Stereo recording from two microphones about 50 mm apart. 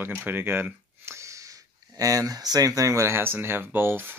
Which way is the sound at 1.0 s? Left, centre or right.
Right.